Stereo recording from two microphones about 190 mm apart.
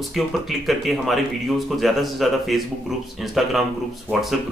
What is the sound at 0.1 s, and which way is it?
Speech, centre (ahead or behind).